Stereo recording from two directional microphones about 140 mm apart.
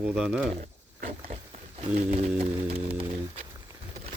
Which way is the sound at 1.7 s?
50° right (ahead or behind).